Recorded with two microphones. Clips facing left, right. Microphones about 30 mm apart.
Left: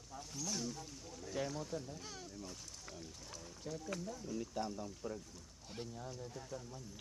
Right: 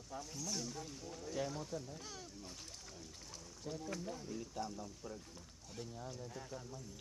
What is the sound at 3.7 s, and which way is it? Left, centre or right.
Speech, centre.